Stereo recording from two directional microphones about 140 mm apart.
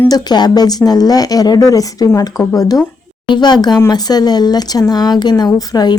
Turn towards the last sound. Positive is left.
turn(degrees=30)  # may be behind; listen again after turning